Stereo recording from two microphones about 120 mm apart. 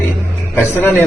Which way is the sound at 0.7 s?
20° left (ahead or behind).